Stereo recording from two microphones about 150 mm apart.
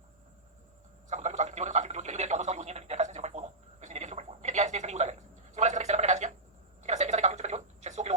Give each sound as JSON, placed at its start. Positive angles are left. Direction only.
{"t": 1.1, "sound": "telephone", "side_deg": -50}